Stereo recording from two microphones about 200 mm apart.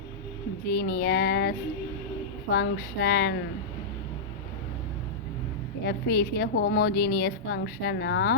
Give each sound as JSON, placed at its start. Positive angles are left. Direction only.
{"t": 0.6, "sound": "speech", "side_deg": 50}
{"t": 5.8, "sound": "speech", "side_deg": 50}